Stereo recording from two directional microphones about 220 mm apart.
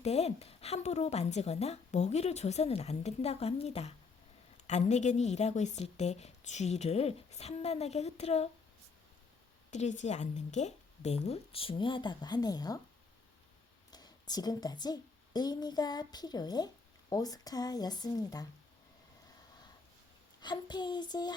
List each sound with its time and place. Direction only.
0.0 s a woman's voice: 30° left (ahead or behind)
9.7 s a woman's voice: 30° left (ahead or behind); by 12.8 s 15° left (ahead or behind)
13.9 s a woman's voice: 20° left (ahead or behind)
20.4 s a woman's voice: 20° left (ahead or behind)